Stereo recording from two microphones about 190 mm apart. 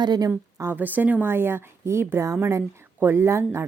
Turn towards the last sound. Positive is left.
turn(degrees=-15)  # may be behind; listen again after turning